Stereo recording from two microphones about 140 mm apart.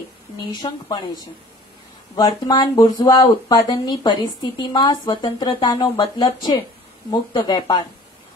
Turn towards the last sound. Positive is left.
turn(degrees=30)  # may be behind; listen again after turning